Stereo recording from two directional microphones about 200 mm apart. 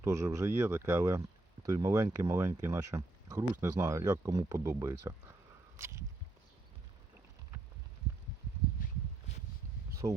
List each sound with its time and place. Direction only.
0.0 s speech: 15° right (ahead or behind)
10.0 s speech: 30° right (ahead or behind)